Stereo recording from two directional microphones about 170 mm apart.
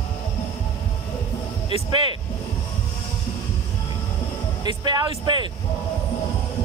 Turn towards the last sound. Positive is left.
turn(degrees=-25)  # may be behind; listen again after turning